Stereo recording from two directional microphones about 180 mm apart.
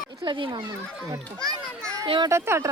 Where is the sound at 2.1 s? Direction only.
20° right (ahead or behind).